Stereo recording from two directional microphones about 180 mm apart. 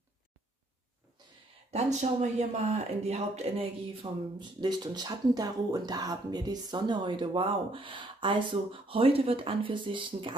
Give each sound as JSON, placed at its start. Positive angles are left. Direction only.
{"t": 1.7, "sound": "speech", "side_deg": -40}